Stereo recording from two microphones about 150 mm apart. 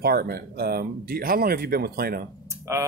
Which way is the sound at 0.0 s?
90° right.